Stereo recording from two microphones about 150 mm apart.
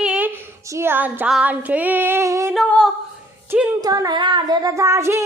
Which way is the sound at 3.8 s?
25° right (ahead or behind).